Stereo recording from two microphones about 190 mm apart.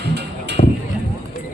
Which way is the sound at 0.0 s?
65° right (ahead or behind).